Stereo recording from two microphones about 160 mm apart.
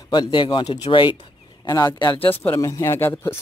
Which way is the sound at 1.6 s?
25° left (ahead or behind).